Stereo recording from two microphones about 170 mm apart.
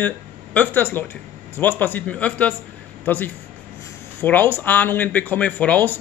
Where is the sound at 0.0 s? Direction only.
10° left (ahead or behind).